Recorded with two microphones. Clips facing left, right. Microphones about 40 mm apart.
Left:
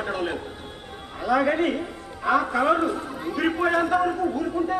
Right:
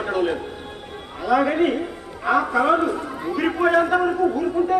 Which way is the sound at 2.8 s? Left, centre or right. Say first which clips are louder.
Right 3 dB; right.